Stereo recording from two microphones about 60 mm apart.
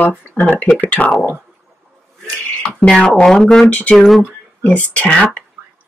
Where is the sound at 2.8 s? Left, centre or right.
Centre.